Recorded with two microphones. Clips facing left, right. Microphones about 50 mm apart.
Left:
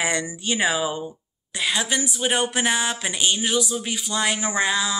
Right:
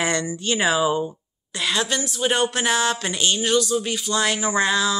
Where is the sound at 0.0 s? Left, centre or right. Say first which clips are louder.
Right 2 dB; centre.